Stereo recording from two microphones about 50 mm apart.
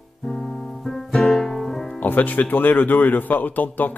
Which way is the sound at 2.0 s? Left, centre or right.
Left.